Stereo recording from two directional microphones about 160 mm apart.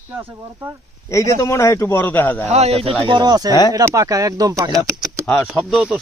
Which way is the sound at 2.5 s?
40° right (ahead or behind).